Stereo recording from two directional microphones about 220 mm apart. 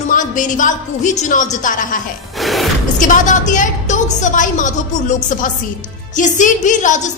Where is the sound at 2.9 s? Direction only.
35° left (ahead or behind).